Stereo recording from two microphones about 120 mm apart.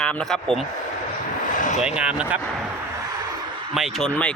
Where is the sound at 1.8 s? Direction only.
10° right (ahead or behind).